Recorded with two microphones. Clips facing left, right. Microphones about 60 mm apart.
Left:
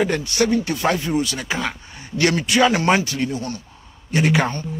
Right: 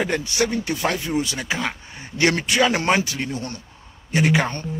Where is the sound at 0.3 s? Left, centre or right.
Centre.